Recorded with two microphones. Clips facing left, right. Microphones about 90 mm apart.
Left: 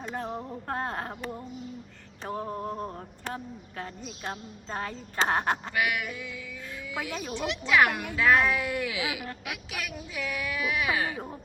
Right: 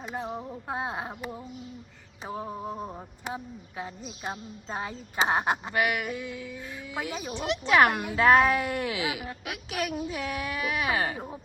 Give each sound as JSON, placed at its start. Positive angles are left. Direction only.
{"t": 0.0, "sound": "speech", "side_deg": -5}
{"t": 5.7, "sound": "speech", "side_deg": -40}
{"t": 7.1, "sound": "speech", "side_deg": -10}
{"t": 7.7, "sound": "speech", "side_deg": -40}